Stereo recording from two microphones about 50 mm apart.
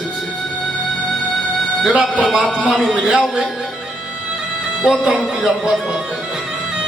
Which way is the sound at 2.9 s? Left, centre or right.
Centre.